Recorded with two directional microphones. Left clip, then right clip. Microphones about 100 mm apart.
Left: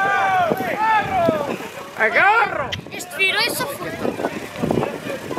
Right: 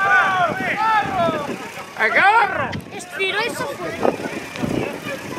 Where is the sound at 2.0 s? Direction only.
45° right (ahead or behind).